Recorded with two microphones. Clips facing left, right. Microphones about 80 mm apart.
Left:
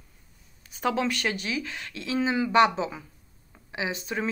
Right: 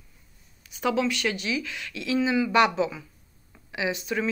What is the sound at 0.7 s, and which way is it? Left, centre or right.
Speech, left.